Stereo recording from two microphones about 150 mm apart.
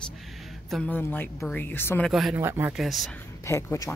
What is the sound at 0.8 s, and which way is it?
Speech, 15° left (ahead or behind).